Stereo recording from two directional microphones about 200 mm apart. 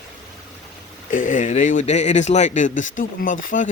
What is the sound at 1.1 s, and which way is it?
A man's voice, 40° left (ahead or behind).